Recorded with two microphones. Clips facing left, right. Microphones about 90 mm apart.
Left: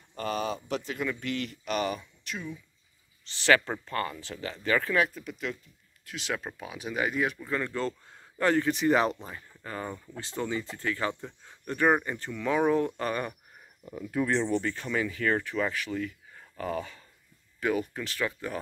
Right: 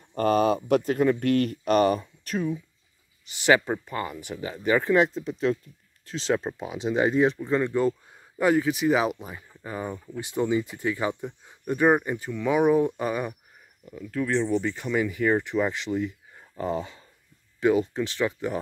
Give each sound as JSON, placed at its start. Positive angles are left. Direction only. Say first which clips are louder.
{"t": 0.1, "sound": "speech", "louder": "right 10 dB", "side_deg": -45}
{"t": 3.3, "sound": "speech", "louder": "right 3 dB", "side_deg": -15}
{"t": 13.9, "sound": "speech", "louder": "right 2 dB", "side_deg": 10}
{"t": 14.5, "sound": "speech", "louder": "right 4 dB", "side_deg": -10}